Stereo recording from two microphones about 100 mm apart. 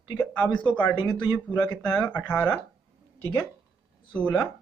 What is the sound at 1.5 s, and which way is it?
Speech, 15° left (ahead or behind).